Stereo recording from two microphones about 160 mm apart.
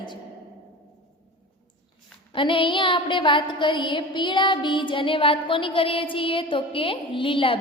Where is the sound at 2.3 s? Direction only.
30° left (ahead or behind).